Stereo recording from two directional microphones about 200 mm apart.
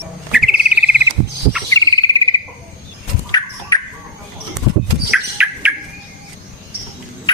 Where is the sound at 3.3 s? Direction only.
20° left (ahead or behind).